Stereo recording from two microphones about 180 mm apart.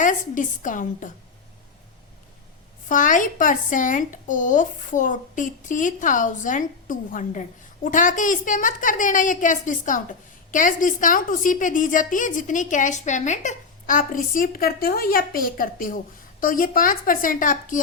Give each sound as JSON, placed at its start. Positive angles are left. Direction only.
{"t": 0.0, "sound": "a woman's voice", "side_deg": 45}
{"t": 2.9, "sound": "a woman's voice", "side_deg": 45}